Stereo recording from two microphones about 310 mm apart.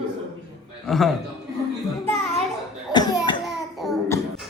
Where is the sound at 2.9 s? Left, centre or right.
Centre.